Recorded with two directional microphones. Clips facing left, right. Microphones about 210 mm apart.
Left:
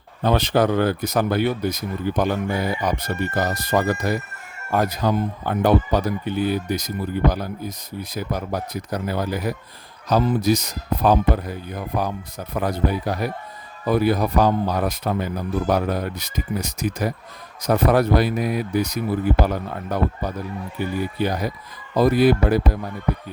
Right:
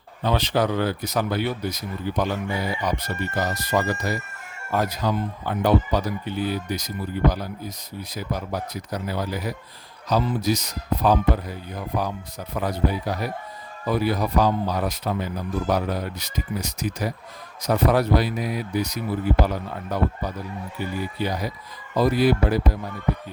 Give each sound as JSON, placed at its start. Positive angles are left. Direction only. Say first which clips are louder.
{"t": 0.2, "sound": "speech", "louder": "left 4 dB", "side_deg": 50}
{"t": 12.5, "sound": "speech", "louder": "left 2 dB", "side_deg": 55}